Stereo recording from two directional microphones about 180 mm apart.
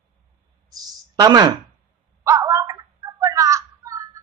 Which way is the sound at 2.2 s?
20° right (ahead or behind).